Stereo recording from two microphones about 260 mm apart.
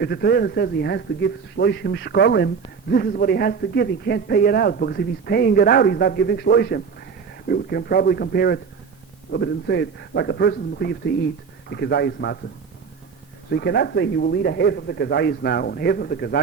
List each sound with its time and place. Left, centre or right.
0.0 s a man's voice: left
13.5 s a man's voice: left